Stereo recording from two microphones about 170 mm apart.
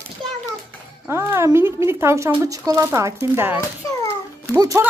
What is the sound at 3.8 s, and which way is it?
Babbling, 20° left (ahead or behind).